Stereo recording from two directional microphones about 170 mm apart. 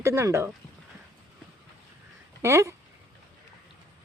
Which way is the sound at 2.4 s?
15° right (ahead or behind).